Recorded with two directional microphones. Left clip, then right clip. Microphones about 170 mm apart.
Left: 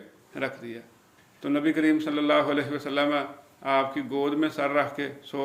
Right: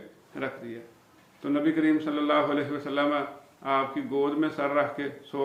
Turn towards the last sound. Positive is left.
turn(degrees=30)  # may be behind; listen again after turning